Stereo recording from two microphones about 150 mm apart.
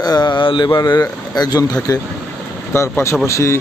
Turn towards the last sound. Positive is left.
turn(degrees=20)  # may be behind; listen again after turning